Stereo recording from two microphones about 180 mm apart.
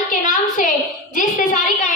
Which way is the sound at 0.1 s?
45° left (ahead or behind).